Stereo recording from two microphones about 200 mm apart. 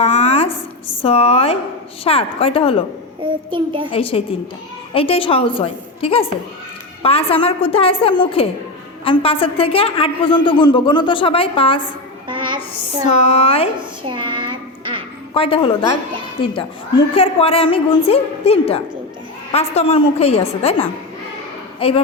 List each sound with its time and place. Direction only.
0.0 s a sound: 30° left (ahead or behind)
1.0 s a man's voice: 30° left (ahead or behind)
3.2 s child singing: 25° right (ahead or behind)
3.9 s a man's voice: 30° left (ahead or behind)
12.3 s music: 25° right (ahead or behind)
13.1 s a man's voice: 30° left (ahead or behind)
14.1 s a sound: 25° right (ahead or behind)
15.3 s a woman's voice: 25° left (ahead or behind)